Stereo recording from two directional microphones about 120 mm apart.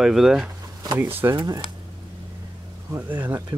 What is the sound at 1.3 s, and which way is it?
Speech, 30° right (ahead or behind).